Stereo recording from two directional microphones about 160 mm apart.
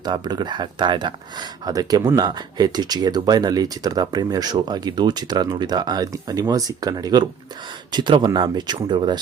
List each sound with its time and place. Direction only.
0.0 s speech: 25° right (ahead or behind)